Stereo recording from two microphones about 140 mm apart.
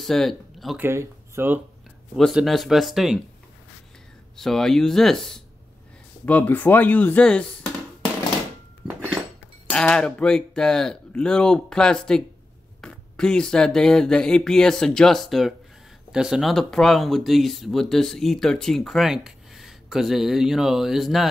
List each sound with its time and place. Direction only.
0.0 s speech: centre (ahead or behind)
0.7 s speech: 20° right (ahead or behind)
2.1 s speech: centre (ahead or behind)
4.4 s speech: centre (ahead or behind)
8.8 s cutlery: 5° right (ahead or behind)
9.7 s speech: 5° left (ahead or behind)